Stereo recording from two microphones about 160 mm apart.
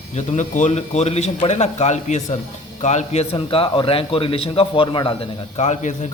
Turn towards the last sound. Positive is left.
turn(degrees=50)  # may be behind; listen again after turning